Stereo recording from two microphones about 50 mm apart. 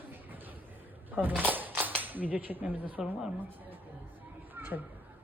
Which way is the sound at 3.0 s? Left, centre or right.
Centre.